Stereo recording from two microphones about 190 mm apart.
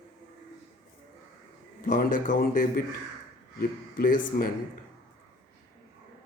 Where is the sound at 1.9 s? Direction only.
45° left (ahead or behind).